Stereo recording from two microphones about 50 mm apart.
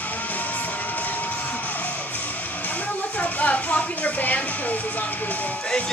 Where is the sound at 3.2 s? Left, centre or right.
Left.